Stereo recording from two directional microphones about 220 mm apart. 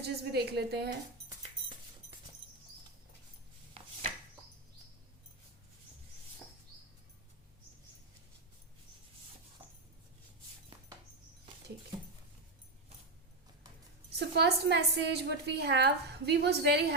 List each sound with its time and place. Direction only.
0.0 s a woman's voice: 45° right (ahead or behind)
14.2 s a woman's voice: 50° right (ahead or behind)